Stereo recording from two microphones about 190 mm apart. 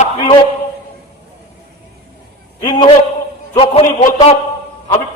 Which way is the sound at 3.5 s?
30° left (ahead or behind).